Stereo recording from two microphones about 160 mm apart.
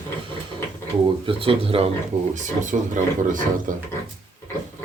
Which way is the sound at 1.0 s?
35° right (ahead or behind).